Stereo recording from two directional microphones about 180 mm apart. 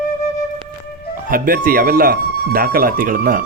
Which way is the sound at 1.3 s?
50° right (ahead or behind).